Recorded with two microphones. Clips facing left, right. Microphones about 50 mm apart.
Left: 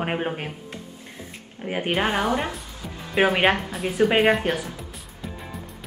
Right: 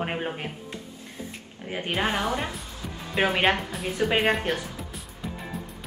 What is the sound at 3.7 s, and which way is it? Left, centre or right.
Speech, centre.